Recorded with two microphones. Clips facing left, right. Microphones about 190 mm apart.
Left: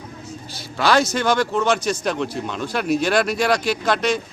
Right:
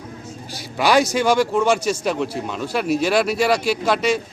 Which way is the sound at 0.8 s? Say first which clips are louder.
Right 2 dB; 15° right (ahead or behind).